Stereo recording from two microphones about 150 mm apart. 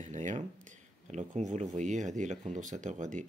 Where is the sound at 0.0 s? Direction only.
55° right (ahead or behind).